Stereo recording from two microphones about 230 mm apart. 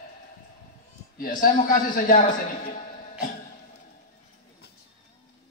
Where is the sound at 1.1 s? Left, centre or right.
Left.